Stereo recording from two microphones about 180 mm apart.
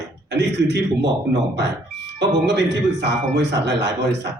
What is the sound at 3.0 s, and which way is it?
A man's voice, 70° right (ahead or behind).